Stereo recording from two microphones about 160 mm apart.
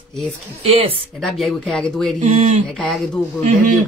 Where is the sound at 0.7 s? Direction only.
35° right (ahead or behind).